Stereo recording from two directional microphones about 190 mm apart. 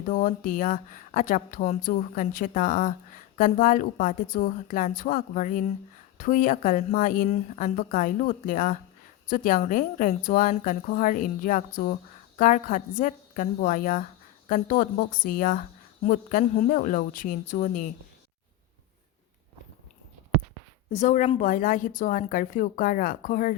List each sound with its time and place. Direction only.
0.1 s speech: 40° left (ahead or behind)
20.9 s a woman's voice: 40° left (ahead or behind)